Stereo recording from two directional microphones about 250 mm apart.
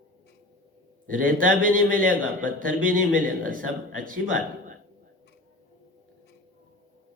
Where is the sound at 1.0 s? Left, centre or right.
Right.